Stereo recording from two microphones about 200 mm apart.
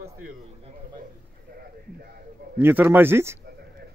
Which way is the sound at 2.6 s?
10° right (ahead or behind).